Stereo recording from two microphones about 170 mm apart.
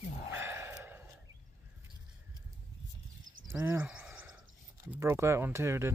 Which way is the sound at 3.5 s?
15° right (ahead or behind).